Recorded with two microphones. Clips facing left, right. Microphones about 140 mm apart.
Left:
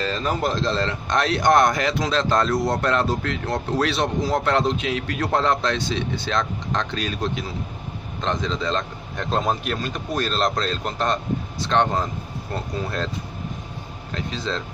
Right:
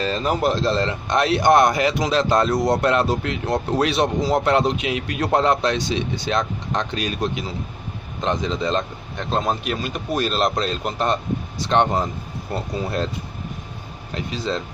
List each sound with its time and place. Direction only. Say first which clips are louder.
0.0 s speech: right 3 dB; 20° right (ahead or behind)
9.1 s speech: even; 5° right (ahead or behind)
14.1 s speech: right 2 dB; 15° right (ahead or behind)